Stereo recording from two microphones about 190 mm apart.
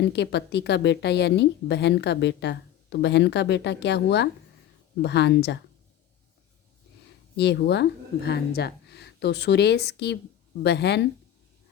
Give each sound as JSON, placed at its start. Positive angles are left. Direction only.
{"t": 0.0, "sound": "a woman's voice", "side_deg": 65}
{"t": 7.3, "sound": "a woman's voice", "side_deg": 65}